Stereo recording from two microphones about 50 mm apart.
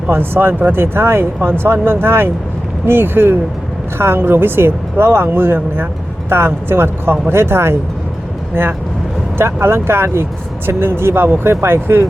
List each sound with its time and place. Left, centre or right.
0.1 s speech: right
9.4 s speech: right